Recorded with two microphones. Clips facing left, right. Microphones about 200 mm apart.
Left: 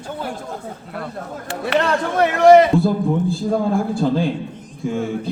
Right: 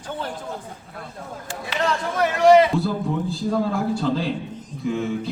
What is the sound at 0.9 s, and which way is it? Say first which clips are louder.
Speech: left 7 dB; 70° left (ahead or behind).